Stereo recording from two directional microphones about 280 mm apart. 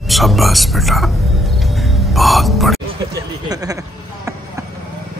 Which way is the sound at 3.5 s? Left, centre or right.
Centre.